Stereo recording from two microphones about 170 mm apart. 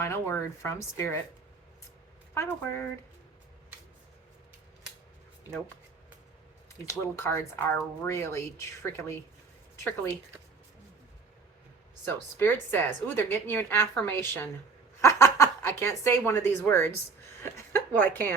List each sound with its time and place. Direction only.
0.0 s a woman's voice: 15° left (ahead or behind)
2.3 s a woman's voice: 15° left (ahead or behind)
6.8 s a woman's voice: 15° left (ahead or behind)
12.0 s a woman's voice: 10° left (ahead or behind)
15.0 s a sound: 15° left (ahead or behind)
16.6 s a woman's voice: 15° left (ahead or behind)
17.4 s a sound: 10° left (ahead or behind)